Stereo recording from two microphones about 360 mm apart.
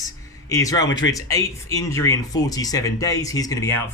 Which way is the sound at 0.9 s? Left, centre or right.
Left.